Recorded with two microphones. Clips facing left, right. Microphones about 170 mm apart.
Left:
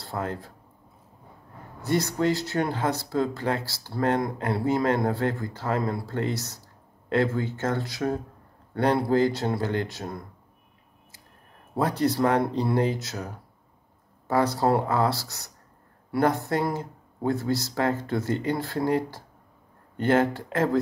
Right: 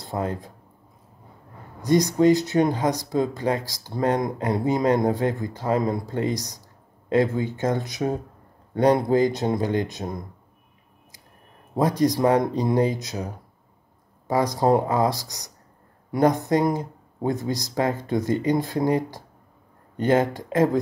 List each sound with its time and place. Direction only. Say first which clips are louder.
0.0 s speech: right 3 dB; 15° right (ahead or behind)
1.8 s speech: right 6 dB; 15° right (ahead or behind)
11.7 s speech: right 4 dB; 15° right (ahead or behind)